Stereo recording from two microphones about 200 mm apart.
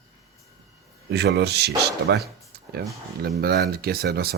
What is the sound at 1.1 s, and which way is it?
Speech, 55° right (ahead or behind).